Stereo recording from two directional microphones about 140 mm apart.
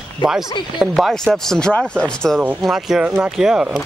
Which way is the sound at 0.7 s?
Centre (ahead or behind).